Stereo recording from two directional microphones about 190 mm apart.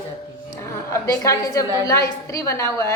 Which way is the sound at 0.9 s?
15° left (ahead or behind).